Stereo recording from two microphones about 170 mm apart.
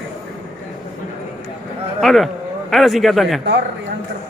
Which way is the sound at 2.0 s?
Centre (ahead or behind).